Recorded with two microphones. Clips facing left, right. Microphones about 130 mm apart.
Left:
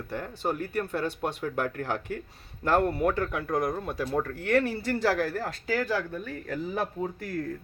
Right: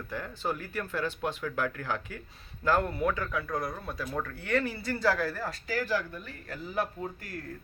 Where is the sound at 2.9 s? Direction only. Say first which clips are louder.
Left 4 dB; 40° left (ahead or behind).